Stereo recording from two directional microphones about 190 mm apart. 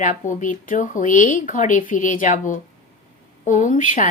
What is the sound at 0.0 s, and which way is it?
A woman's voice, 40° left (ahead or behind).